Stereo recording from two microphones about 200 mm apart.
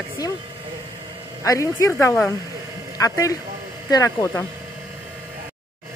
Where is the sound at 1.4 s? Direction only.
15° left (ahead or behind).